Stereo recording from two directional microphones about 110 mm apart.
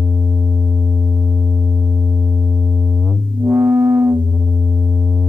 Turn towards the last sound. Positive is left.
turn(degrees=-20)  # may be behind; listen again after turning